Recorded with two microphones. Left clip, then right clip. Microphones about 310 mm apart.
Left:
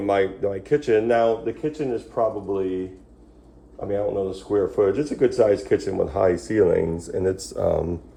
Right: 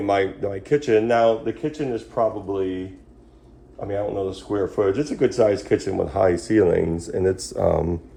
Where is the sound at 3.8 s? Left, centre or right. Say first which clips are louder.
Left 1 dB; right.